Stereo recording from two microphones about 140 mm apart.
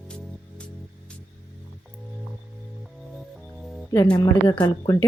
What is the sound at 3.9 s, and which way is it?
A woman's voice, 25° left (ahead or behind).